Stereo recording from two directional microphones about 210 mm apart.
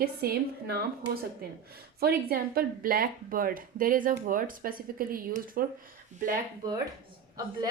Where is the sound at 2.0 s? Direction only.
45° right (ahead or behind).